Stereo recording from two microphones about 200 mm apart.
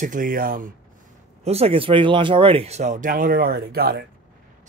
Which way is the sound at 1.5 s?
30° right (ahead or behind).